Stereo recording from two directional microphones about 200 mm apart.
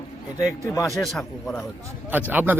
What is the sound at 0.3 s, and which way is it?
Speech, 15° left (ahead or behind).